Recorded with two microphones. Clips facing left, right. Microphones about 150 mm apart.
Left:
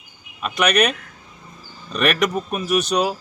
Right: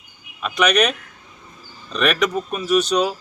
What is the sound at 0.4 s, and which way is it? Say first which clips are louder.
Speech: right 1 dB; 10° left (ahead or behind).